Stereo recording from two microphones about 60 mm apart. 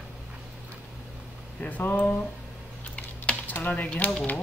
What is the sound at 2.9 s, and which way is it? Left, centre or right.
Typing, left.